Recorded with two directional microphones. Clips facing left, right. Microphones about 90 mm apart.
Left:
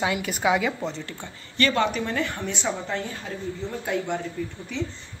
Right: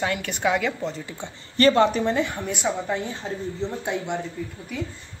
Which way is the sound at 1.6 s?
35° right (ahead or behind).